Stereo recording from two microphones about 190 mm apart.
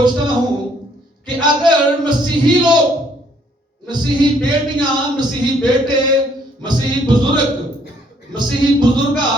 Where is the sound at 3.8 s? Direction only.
25° right (ahead or behind).